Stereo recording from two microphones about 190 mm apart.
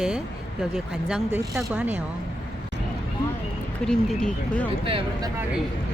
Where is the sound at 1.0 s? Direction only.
5° right (ahead or behind).